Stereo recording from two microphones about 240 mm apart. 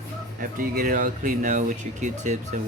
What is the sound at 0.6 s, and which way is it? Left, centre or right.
Speech, right.